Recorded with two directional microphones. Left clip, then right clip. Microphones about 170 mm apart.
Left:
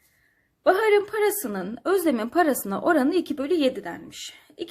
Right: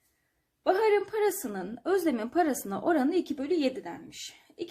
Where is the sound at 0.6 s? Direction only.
40° left (ahead or behind).